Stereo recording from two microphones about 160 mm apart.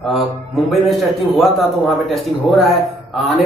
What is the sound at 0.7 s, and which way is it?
A man's voice, centre (ahead or behind).